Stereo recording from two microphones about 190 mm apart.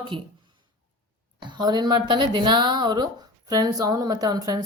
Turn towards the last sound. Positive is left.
turn(degrees=-20)  # may be behind; listen again after turning